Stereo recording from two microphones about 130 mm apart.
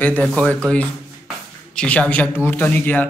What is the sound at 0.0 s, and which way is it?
Speech, 10° left (ahead or behind).